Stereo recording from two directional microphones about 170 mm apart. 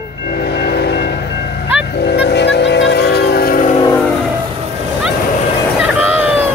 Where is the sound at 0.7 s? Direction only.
80° left.